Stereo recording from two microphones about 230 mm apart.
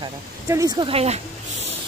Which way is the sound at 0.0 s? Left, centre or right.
Centre.